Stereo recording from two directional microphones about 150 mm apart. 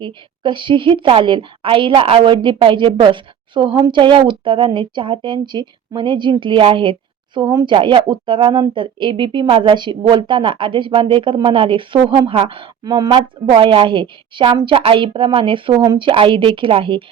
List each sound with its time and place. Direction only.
0.0 s a woman's voice: 30° right (ahead or behind)